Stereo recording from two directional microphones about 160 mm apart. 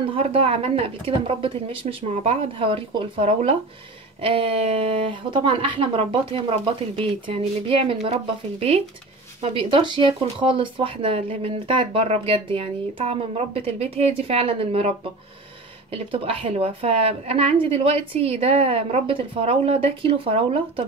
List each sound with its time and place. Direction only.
0.1 s speech: 35° right (ahead or behind)